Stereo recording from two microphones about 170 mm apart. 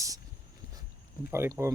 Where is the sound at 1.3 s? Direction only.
15° right (ahead or behind).